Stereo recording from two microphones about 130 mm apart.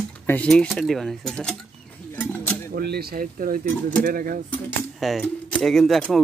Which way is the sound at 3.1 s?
90° right.